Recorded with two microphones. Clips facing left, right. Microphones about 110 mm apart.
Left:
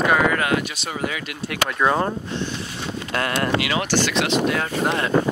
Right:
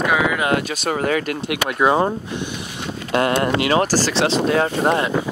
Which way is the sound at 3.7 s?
40° right (ahead or behind).